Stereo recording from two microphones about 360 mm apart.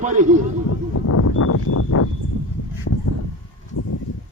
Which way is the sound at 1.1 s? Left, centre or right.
Left.